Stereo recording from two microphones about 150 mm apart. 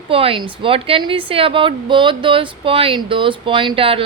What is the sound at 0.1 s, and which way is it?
A woman's voice, 40° right (ahead or behind).